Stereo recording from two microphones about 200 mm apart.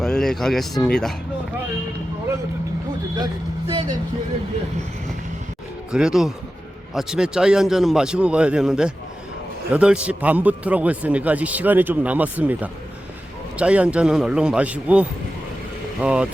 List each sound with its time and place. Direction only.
0.0 s a man's voice: 5° left (ahead or behind)
3.7 s speech: 20° right (ahead or behind)
5.9 s a man's voice: 5° right (ahead or behind)